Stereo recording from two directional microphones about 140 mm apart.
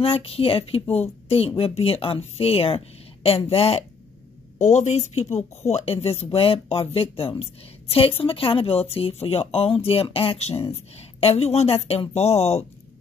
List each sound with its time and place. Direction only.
0.0 s speech: 40° left (ahead or behind)
4.6 s a woman's voice: 55° left (ahead or behind)